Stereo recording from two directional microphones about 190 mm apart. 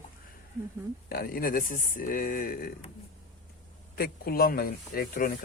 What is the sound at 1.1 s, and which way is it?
A man's voice, 50° left (ahead or behind).